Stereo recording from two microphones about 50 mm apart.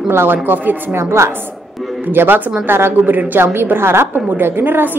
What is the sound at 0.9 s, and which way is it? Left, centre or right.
Speech, right.